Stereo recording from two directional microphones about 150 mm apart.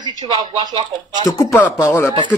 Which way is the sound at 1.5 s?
20° left (ahead or behind).